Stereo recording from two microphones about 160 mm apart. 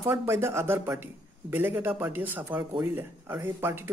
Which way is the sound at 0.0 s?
15° right (ahead or behind).